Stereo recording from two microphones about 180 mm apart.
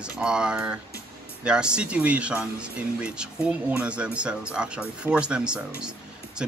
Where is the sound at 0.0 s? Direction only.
5° right (ahead or behind).